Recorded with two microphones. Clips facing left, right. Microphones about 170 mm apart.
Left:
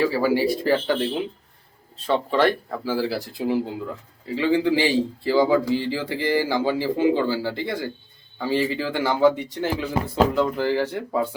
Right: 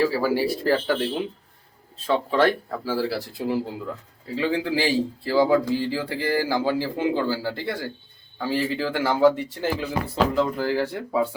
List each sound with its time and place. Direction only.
0.0 s a man's voice: centre (ahead or behind)
2.3 s a man's voice: centre (ahead or behind)